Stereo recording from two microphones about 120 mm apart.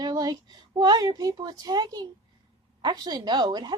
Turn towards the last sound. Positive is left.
turn(degrees=-35)  # may be behind; listen again after turning